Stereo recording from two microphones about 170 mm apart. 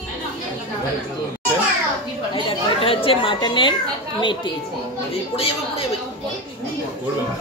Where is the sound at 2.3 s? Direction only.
35° left (ahead or behind).